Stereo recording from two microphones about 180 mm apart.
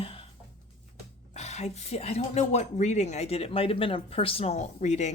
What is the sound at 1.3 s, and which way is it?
Speech, 40° left (ahead or behind).